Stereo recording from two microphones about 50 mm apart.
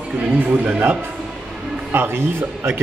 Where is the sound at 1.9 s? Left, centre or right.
Right.